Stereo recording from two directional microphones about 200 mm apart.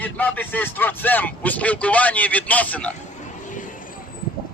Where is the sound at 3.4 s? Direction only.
40° left (ahead or behind).